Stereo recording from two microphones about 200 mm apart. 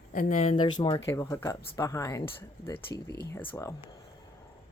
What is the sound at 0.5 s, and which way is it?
Speech, 25° left (ahead or behind).